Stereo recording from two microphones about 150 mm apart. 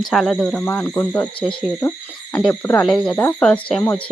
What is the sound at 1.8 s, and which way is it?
Speech, 10° left (ahead or behind).